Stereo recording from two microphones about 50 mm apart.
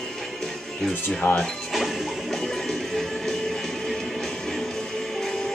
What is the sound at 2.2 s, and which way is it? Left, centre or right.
Music, centre.